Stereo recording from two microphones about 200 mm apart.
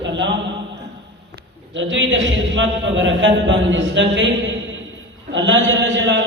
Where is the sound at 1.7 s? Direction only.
65° right (ahead or behind).